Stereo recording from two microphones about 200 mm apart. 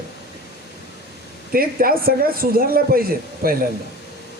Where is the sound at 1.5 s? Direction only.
45° right (ahead or behind).